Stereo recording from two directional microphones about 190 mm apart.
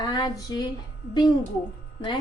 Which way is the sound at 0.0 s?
20° left (ahead or behind).